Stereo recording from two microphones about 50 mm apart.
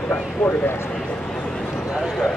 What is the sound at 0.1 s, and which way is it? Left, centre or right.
Speech, left.